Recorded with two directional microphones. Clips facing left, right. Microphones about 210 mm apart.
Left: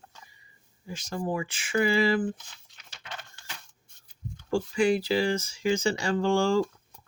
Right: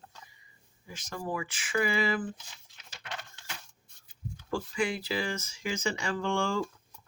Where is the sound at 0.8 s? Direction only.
30° left (ahead or behind).